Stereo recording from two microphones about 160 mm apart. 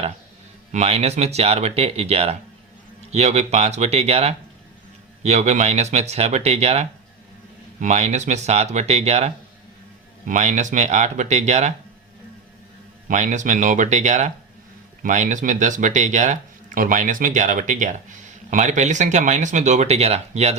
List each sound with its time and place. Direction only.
0.7 s speech: 45° right (ahead or behind)
13.1 s speech: 50° right (ahead or behind)